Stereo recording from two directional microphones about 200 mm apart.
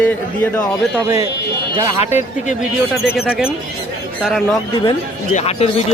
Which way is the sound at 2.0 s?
35° left (ahead or behind).